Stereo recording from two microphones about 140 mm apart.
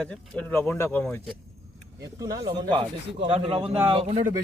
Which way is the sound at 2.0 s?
25° right (ahead or behind).